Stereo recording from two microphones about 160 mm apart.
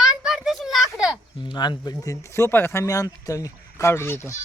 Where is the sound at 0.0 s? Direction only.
5° right (ahead or behind).